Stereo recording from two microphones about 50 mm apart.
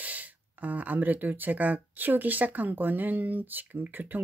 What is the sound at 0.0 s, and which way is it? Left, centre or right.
Speech, right.